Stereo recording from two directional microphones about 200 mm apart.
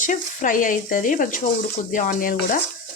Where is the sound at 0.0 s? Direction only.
40° left (ahead or behind).